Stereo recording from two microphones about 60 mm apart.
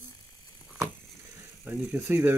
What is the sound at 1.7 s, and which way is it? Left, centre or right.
Speech, right.